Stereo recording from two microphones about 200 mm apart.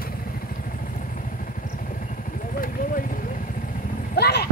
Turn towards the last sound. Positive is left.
turn(degrees=50)  # may be behind; listen again after turning